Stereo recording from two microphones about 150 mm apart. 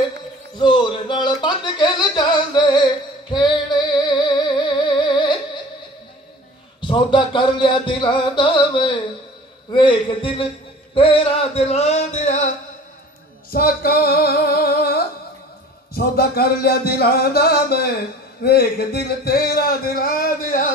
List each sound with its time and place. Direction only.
0.6 s music: 30° left (ahead or behind)
6.8 s music: 30° left (ahead or behind); by 12.4 s 55° left (ahead or behind)
13.5 s singing: 80° left
15.9 s speech: 90° left; by 20.7 s 65° left (ahead or behind)